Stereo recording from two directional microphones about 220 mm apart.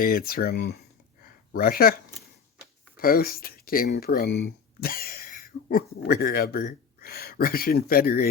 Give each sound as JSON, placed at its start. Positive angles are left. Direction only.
{"t": 0.0, "sound": "speech", "side_deg": 40}
{"t": 3.0, "sound": "speech", "side_deg": 40}